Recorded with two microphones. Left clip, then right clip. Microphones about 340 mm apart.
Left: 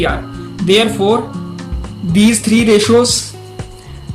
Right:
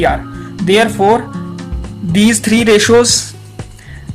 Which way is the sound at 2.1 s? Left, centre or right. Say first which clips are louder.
Right 1 dB; right.